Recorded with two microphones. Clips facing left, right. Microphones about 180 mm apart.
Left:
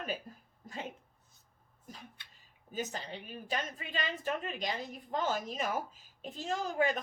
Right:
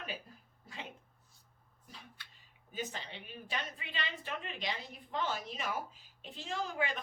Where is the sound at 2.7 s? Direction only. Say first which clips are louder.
Left 3 dB; 40° left (ahead or behind).